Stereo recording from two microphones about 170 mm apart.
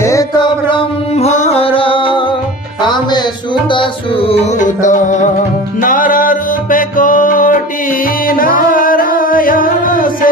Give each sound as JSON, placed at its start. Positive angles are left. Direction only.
{"t": 0.0, "sound": "music", "side_deg": 20}
{"t": 0.7, "sound": "music", "side_deg": 40}
{"t": 4.6, "sound": "music", "side_deg": 50}